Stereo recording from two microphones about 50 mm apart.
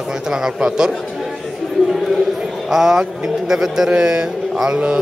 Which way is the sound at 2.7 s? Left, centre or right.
Centre.